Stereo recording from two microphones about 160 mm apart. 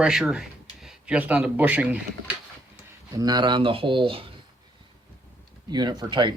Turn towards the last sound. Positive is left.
turn(degrees=-30)  # may be behind; listen again after turning